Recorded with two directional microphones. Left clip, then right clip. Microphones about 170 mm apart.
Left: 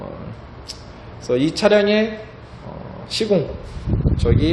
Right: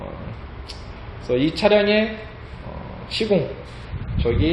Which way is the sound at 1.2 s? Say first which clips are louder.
Left 2 dB; 20° left (ahead or behind).